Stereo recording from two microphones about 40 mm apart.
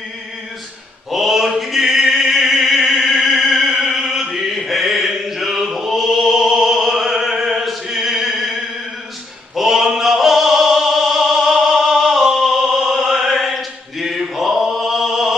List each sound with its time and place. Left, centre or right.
1.1 s a sound: centre
5.8 s opera: centre
9.6 s opera: centre